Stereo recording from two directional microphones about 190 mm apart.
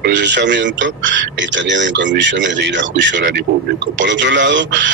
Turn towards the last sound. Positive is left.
turn(degrees=-70)  # may be behind; listen again after turning